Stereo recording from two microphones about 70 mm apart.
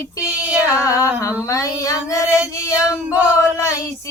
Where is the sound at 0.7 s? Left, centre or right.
Left.